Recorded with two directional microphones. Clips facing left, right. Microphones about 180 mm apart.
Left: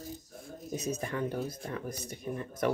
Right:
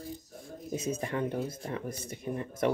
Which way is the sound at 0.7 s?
30° right (ahead or behind).